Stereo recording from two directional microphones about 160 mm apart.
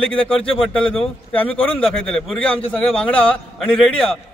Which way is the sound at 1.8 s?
Centre (ahead or behind).